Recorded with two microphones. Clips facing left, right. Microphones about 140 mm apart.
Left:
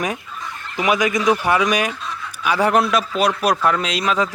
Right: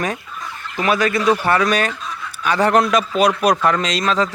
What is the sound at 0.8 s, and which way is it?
Speech, 15° left (ahead or behind).